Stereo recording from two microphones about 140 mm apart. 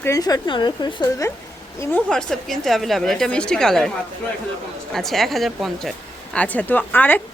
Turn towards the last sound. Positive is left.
turn(degrees=10)  # may be behind; listen again after turning